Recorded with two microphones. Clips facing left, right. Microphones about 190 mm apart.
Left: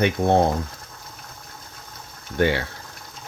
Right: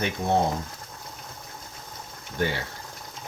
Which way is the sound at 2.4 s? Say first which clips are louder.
Left 7 dB; 70° left (ahead or behind).